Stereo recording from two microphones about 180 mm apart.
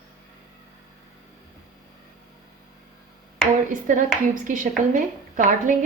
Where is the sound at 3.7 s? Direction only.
45° right (ahead or behind).